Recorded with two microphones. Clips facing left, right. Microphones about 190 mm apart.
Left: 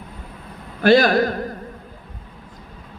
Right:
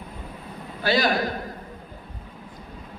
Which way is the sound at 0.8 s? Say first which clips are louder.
Left 8 dB; 50° left (ahead or behind).